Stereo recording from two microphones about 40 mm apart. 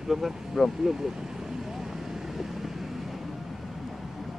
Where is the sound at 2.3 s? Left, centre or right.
Centre.